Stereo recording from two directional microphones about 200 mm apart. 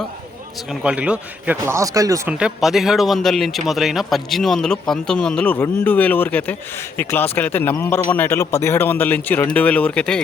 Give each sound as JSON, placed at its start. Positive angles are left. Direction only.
{"t": 0.7, "sound": "speech", "side_deg": -5}
{"t": 2.4, "sound": "a man's voice", "side_deg": 0}